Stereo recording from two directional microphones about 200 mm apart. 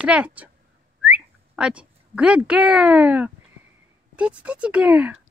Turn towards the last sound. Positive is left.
turn(degrees=-5)  # may be behind; listen again after turning